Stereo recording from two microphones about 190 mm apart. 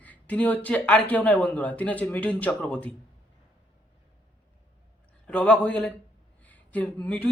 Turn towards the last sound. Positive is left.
turn(degrees=10)  # may be behind; listen again after turning